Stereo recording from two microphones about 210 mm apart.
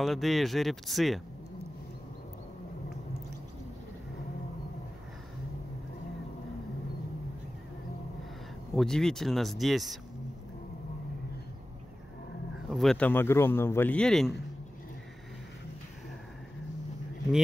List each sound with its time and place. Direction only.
0.0 s speech: centre (ahead or behind)
8.7 s speech: centre (ahead or behind)
12.6 s speech: centre (ahead or behind)